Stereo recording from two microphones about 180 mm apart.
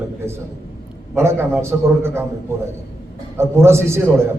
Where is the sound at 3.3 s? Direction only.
15° right (ahead or behind).